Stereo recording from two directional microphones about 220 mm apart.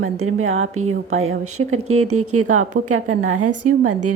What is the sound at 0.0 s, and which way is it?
A woman's voice, 80° right.